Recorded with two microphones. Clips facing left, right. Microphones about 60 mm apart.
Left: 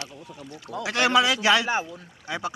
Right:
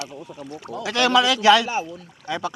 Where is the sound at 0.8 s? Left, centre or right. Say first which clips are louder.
Right 2 dB; centre.